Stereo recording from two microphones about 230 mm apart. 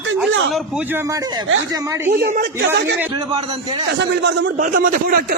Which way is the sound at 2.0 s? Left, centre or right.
Right.